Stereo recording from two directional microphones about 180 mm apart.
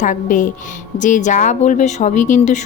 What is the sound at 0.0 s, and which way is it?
Speech, 45° left (ahead or behind).